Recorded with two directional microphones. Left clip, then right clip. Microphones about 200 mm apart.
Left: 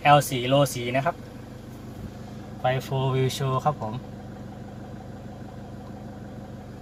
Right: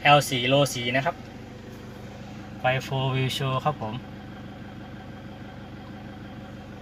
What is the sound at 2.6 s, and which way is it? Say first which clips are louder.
Speech: even; 5° right (ahead or behind).